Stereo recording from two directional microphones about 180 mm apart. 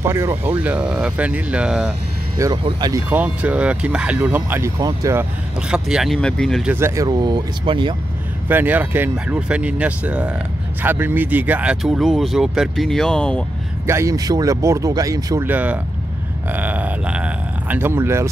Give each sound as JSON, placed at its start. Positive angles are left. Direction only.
{"t": 0.0, "sound": "speech", "side_deg": -15}
{"t": 2.3, "sound": "speech", "side_deg": -20}
{"t": 3.1, "sound": "speech", "side_deg": -10}
{"t": 5.7, "sound": "speech", "side_deg": -5}
{"t": 6.7, "sound": "speech", "side_deg": -15}
{"t": 8.5, "sound": "speech", "side_deg": -10}
{"t": 13.8, "sound": "speech", "side_deg": -15}